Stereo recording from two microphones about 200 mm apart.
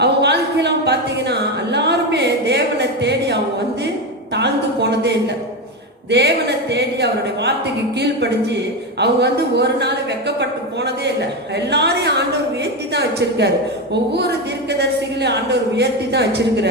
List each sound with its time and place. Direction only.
0.0 s a sound: 60° right (ahead or behind)
4.4 s speech: 55° right (ahead or behind)
9.0 s speech: 55° right (ahead or behind)